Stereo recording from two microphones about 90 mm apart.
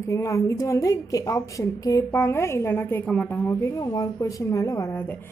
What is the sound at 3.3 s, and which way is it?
A woman's voice, 35° left (ahead or behind).